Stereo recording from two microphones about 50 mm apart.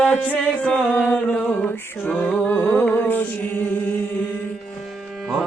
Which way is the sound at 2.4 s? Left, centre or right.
Left.